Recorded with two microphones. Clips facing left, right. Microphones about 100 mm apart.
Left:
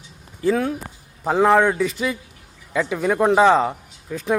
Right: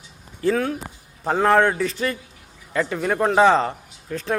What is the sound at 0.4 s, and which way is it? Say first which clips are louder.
Speech: left 1 dB; 15° left (ahead or behind).